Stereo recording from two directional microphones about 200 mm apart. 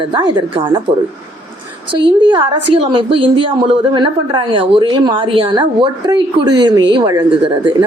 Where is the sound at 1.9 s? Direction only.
25° right (ahead or behind).